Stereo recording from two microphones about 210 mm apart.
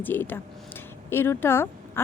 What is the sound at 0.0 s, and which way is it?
Speech, 10° left (ahead or behind).